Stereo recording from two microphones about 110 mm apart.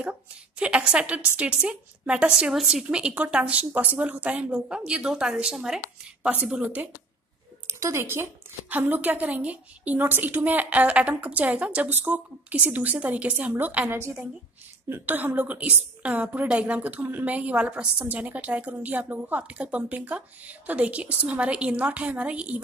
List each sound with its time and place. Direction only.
0.0 s a woman's voice: 10° right (ahead or behind)
7.6 s a woman's voice: 25° right (ahead or behind)